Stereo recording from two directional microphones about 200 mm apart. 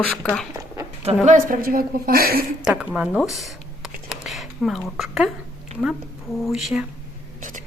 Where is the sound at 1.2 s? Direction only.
40° right (ahead or behind).